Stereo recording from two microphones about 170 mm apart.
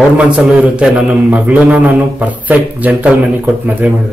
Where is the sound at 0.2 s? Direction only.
5° right (ahead or behind).